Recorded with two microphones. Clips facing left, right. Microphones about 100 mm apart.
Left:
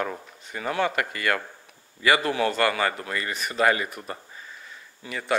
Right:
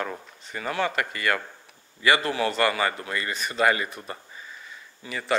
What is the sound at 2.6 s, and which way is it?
Speech, 5° right (ahead or behind).